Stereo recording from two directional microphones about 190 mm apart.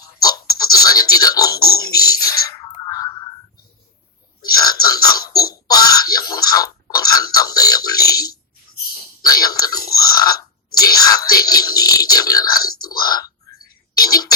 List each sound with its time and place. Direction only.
0.0 s music: 20° left (ahead or behind)
1.2 s speech: 20° left (ahead or behind)
2.0 s a sound: 20° left (ahead or behind)
4.5 s music: 20° left (ahead or behind)
6.1 s a sound: 20° left (ahead or behind)
9.2 s speech: 20° left (ahead or behind)